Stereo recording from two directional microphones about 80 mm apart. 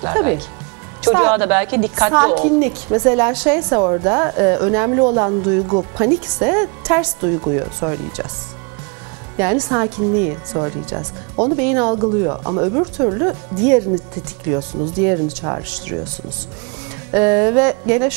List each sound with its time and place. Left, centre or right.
0.0 s a woman's voice: centre
9.4 s a woman's voice: centre
17.1 s a woman's voice: centre